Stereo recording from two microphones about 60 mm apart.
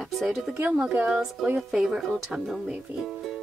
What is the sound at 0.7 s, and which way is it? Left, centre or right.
Speech, centre.